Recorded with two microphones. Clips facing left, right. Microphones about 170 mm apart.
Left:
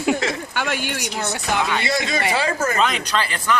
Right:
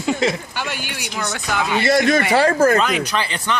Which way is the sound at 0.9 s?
40° left (ahead or behind).